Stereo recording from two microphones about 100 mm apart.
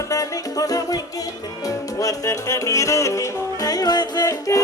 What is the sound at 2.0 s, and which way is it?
Music, 35° left (ahead or behind).